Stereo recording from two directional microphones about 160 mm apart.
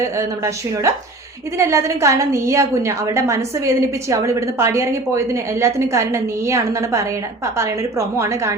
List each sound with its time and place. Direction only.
0.0 s a woman's voice: 20° right (ahead or behind)